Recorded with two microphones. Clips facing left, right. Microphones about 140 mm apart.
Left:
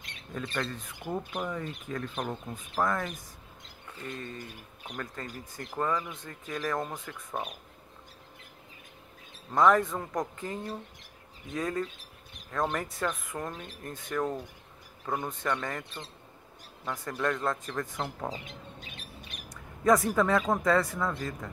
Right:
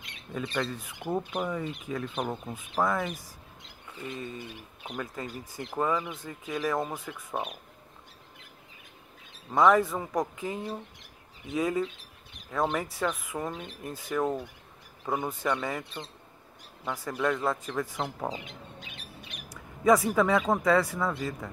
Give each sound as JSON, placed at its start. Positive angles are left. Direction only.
{"t": 0.3, "sound": "speech", "side_deg": -5}
{"t": 9.5, "sound": "speech", "side_deg": -5}
{"t": 18.4, "sound": "bird", "side_deg": 45}
{"t": 19.5, "sound": "speech", "side_deg": -5}